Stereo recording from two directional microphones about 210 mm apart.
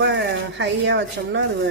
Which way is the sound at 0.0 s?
55° right (ahead or behind).